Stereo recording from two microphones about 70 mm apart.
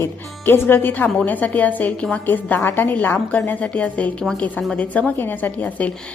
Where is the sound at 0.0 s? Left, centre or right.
Left.